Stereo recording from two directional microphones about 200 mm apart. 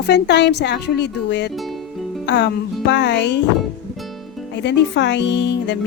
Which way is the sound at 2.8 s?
60° left (ahead or behind).